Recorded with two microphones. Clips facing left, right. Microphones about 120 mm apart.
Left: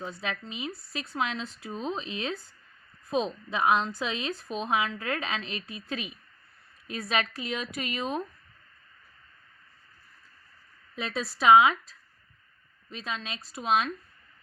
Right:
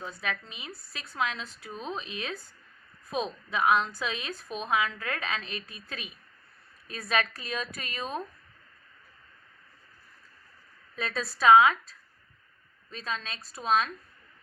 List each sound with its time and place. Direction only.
0.0 s a woman's voice: 20° left (ahead or behind)
10.9 s speech: 15° left (ahead or behind)
12.9 s speech: 15° left (ahead or behind)